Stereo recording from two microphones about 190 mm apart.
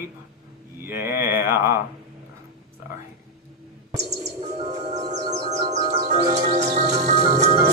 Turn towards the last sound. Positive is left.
turn(degrees=-35)  # may be behind; listen again after turning